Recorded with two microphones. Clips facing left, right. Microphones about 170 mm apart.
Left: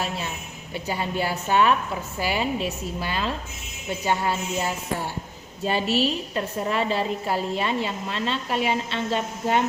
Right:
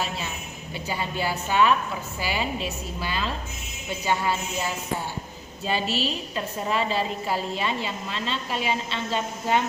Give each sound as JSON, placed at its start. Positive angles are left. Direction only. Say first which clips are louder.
{"t": 0.9, "sound": "a woman's voice", "louder": "left 2 dB", "side_deg": 50}
{"t": 5.6, "sound": "a woman's voice", "louder": "left 4 dB", "side_deg": 60}